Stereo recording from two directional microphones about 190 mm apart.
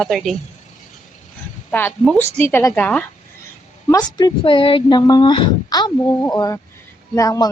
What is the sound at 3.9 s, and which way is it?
Speech, 20° left (ahead or behind).